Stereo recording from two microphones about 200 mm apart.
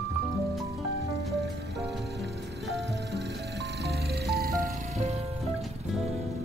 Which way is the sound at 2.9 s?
55° right (ahead or behind).